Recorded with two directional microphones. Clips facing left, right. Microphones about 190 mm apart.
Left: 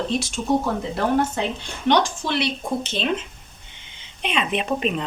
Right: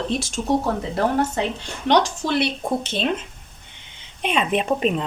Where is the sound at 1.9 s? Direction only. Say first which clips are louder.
Right 1 dB; 40° right (ahead or behind).